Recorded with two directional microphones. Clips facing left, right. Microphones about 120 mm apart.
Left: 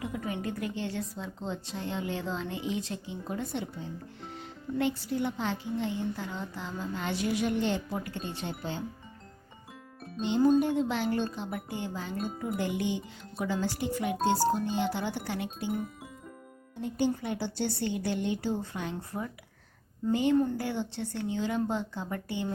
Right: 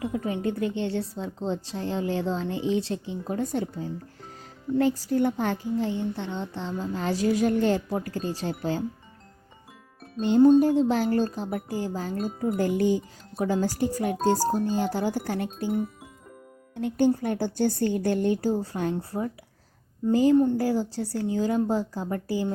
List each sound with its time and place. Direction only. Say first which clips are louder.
0.0 s a woman's voice: right 6 dB; 30° right (ahead or behind); by 5.8 s 50° right (ahead or behind)
5.8 s speech: right 4 dB; 30° right (ahead or behind)
10.2 s a woman's voice: right 7 dB; 45° right (ahead or behind)
17.0 s a woman's voice: right 7 dB; 45° right (ahead or behind)
20.3 s a woman's voice: right 6 dB; 25° right (ahead or behind)
20.6 s speech: right 7 dB; 35° right (ahead or behind)